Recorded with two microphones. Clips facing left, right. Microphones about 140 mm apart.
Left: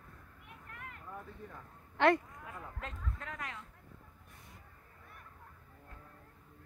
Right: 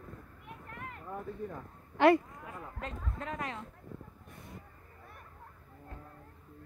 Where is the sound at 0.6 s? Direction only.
35° right (ahead or behind).